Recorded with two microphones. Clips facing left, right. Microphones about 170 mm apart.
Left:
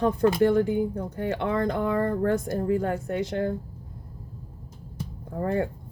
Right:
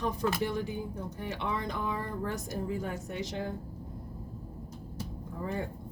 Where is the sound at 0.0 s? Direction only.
55° left (ahead or behind).